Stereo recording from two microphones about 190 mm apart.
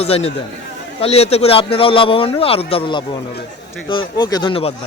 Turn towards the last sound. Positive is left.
turn(degrees=30)  # may be behind; listen again after turning